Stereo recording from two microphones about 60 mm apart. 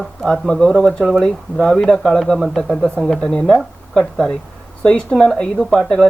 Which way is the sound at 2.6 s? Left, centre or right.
Centre.